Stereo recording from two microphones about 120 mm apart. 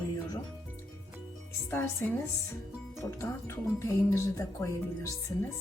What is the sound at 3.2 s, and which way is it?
Speech, 20° left (ahead or behind).